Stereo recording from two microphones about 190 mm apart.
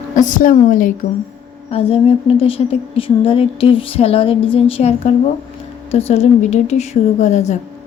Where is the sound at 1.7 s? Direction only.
30° left (ahead or behind).